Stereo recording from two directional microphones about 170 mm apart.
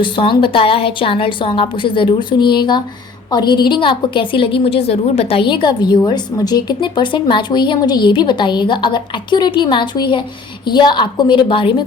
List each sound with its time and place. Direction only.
0.0 s a woman's voice: 30° left (ahead or behind)